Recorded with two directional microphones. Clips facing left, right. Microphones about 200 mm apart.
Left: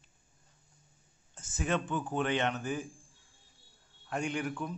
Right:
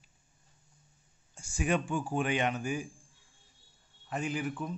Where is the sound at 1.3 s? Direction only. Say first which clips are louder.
Right 2 dB; 10° right (ahead or behind).